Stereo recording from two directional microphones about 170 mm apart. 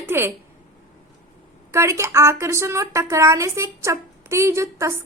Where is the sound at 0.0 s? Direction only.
15° right (ahead or behind).